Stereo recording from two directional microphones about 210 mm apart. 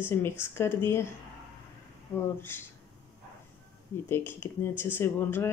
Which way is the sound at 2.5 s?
10° left (ahead or behind).